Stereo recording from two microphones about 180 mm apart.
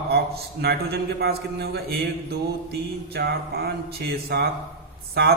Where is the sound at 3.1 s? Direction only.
60° right (ahead or behind).